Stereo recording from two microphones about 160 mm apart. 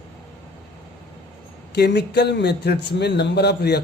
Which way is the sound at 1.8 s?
90° left.